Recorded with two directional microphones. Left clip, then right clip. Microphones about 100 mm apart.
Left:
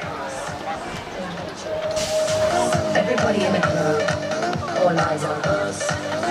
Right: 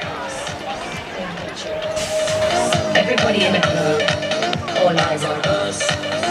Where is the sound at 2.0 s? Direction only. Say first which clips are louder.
Right 1 dB; 5° right (ahead or behind).